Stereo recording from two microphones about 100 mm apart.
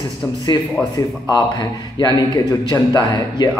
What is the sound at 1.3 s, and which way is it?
A man's voice, 45° left (ahead or behind).